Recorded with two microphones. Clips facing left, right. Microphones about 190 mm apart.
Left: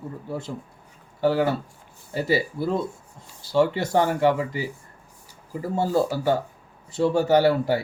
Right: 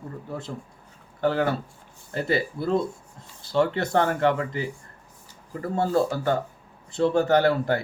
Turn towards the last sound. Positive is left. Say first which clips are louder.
# left 2 dB
turn(degrees=10)  # may be behind; listen again after turning